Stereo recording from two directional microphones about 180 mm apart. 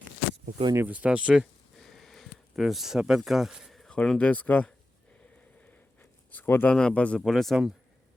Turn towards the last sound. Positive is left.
turn(degrees=0)  # may be behind; listen again after turning